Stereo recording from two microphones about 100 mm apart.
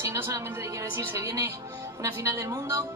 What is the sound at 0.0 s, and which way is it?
A woman's voice, 35° right (ahead or behind).